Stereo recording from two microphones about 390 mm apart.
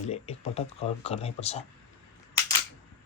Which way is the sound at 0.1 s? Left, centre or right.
Centre.